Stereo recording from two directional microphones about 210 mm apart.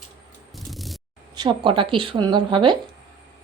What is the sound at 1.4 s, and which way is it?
A woman's voice, 20° right (ahead or behind).